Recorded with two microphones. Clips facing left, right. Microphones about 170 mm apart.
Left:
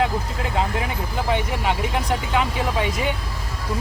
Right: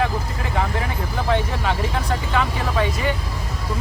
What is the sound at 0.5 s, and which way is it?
Speech, 20° left (ahead or behind).